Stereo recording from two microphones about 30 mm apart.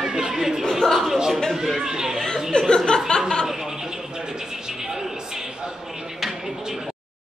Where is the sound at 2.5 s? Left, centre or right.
Left.